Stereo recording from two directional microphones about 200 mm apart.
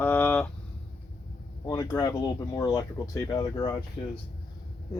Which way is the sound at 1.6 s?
20° left (ahead or behind).